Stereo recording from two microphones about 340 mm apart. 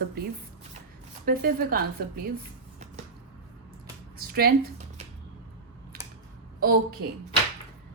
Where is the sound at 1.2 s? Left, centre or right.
Right.